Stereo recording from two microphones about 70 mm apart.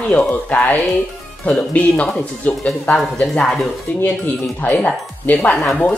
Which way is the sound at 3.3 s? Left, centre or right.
Centre.